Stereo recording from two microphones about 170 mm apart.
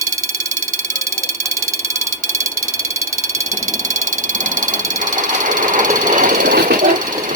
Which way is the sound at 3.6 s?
45° right (ahead or behind).